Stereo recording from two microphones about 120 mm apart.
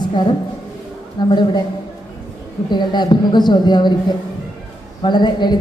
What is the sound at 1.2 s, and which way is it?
Speech, 40° left (ahead or behind).